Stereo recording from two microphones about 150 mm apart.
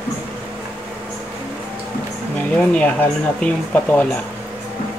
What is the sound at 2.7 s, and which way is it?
Speech, 10° left (ahead or behind).